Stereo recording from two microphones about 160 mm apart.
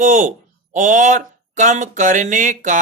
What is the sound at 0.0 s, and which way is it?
Speech, 55° right (ahead or behind).